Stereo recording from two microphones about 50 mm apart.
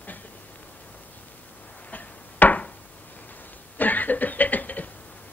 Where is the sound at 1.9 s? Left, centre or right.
Left.